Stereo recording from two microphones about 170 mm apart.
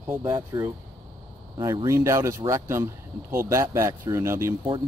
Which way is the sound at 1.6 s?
20° right (ahead or behind).